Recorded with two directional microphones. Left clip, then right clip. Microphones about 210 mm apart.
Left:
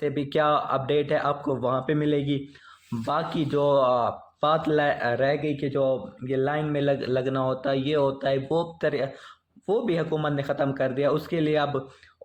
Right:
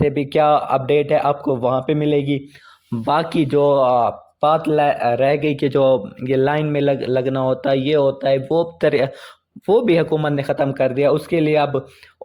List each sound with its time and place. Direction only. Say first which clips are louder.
0.0 s a man's voice: right 8 dB; 30° right (ahead or behind)
3.1 s a man's voice: right 9 dB; 40° right (ahead or behind); by 5.2 s 20° right (ahead or behind)
5.2 s speech: right 8 dB; 40° right (ahead or behind)